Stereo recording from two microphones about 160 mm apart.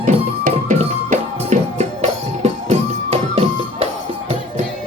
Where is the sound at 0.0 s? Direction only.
55° right (ahead or behind).